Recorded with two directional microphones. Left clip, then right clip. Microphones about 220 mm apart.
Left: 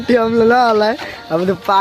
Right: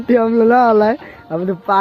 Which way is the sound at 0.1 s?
5° left (ahead or behind).